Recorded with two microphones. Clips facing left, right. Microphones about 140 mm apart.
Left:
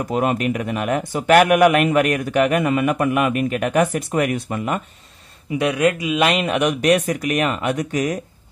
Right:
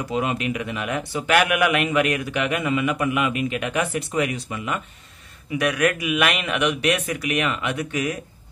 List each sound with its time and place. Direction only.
0.1 s speech: 50° left (ahead or behind)
5.6 s speech: 25° left (ahead or behind)